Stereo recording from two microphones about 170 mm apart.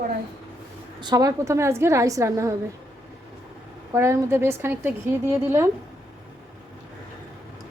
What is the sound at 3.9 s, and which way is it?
A woman's voice, 15° right (ahead or behind).